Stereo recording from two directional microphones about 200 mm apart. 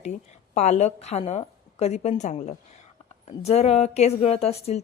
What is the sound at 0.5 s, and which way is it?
A woman's voice, 35° left (ahead or behind).